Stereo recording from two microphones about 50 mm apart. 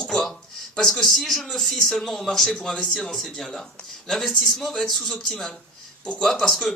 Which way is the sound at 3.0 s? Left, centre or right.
Centre.